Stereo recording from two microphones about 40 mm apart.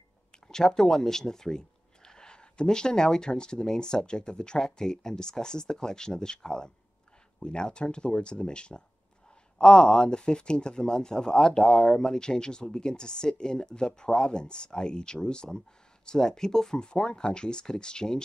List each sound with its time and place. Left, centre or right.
0.5 s speech: centre